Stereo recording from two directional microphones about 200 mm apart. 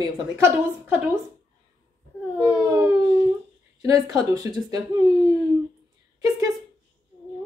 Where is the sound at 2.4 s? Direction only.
15° right (ahead or behind).